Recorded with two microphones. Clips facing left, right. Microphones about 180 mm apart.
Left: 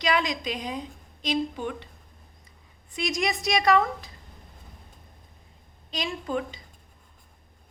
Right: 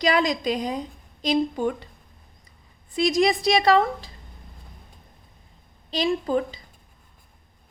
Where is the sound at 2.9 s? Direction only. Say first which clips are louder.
Right 8 dB; 35° right (ahead or behind).